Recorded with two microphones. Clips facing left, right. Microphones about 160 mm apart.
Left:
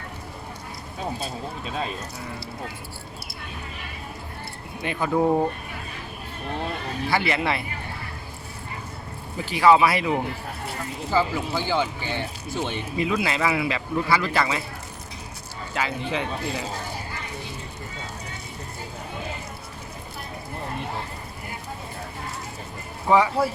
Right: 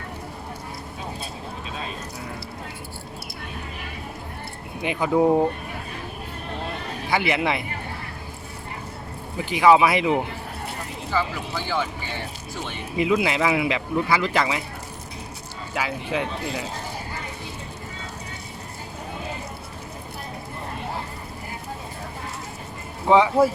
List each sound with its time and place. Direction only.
4.8 s speech: 15° right (ahead or behind)
7.1 s speech: 15° right (ahead or behind)
9.5 s speech: 15° right (ahead or behind)
11.1 s speech: 30° left (ahead or behind)
13.0 s speech: 15° right (ahead or behind)
15.7 s speech: 5° right (ahead or behind)
23.0 s speech: 20° right (ahead or behind)